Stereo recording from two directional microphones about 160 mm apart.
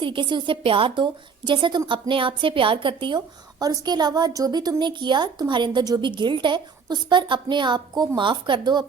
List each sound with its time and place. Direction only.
0.0 s a woman's voice: 30° right (ahead or behind)